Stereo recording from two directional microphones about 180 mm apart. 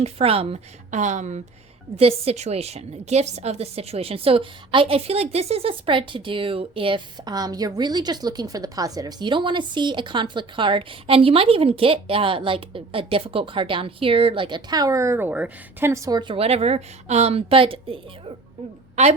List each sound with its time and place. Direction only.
0.0 s a woman's voice: 35° right (ahead or behind)